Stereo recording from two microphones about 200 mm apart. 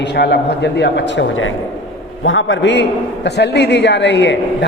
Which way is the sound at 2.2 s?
75° left (ahead or behind).